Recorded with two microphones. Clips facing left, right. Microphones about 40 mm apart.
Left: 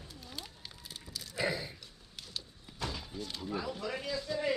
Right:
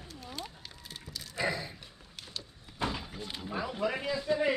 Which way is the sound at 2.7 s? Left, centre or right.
Right.